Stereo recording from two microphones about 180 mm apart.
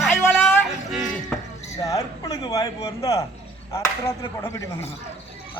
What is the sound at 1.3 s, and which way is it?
Chink, 5° left (ahead or behind).